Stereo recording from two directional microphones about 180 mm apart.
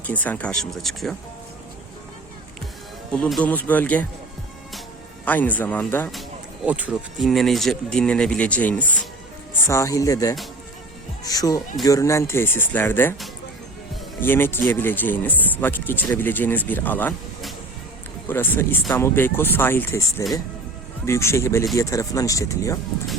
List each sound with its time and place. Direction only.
0.0 s speech: 10° left (ahead or behind)
3.1 s speech: 5° left (ahead or behind)
5.2 s speech: 10° left (ahead or behind)
6.7 s speech: 10° right (ahead or behind); by 13.1 s 10° left (ahead or behind)
14.2 s speech: 10° left (ahead or behind)
18.3 s speech: 10° left (ahead or behind)